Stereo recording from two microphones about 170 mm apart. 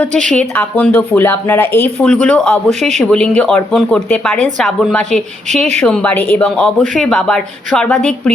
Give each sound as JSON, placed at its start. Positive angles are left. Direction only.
{"t": 0.1, "sound": "speech", "side_deg": -45}
{"t": 0.3, "sound": "a woman's voice", "side_deg": 5}